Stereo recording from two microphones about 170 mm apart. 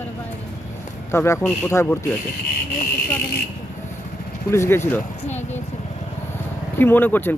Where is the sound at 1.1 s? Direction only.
15° left (ahead or behind).